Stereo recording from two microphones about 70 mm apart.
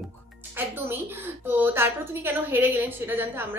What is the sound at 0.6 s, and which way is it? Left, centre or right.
A woman's voice, right.